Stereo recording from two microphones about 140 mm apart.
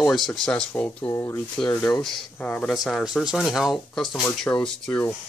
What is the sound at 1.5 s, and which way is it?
Speech, 10° left (ahead or behind).